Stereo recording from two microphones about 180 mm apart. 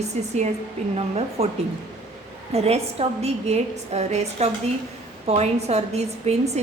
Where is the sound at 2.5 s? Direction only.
35° right (ahead or behind).